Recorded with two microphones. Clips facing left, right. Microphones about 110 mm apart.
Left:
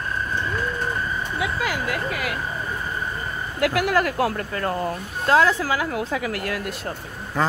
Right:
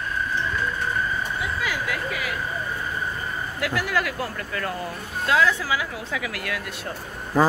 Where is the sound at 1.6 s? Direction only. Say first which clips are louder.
Left 2 dB; 50° left (ahead or behind).